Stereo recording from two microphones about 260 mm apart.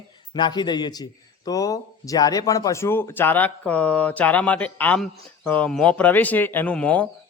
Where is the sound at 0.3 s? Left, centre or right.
Centre.